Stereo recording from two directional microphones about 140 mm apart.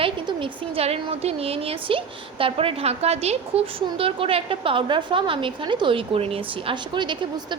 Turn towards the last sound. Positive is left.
turn(degrees=-35)  # may be behind; listen again after turning